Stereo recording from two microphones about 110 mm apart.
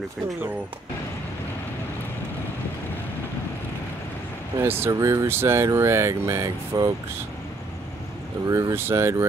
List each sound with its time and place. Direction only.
4.6 s speech: 20° right (ahead or behind)
8.5 s speech: 30° right (ahead or behind)